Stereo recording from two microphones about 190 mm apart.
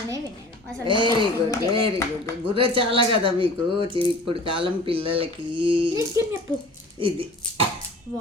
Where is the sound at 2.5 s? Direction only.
25° right (ahead or behind).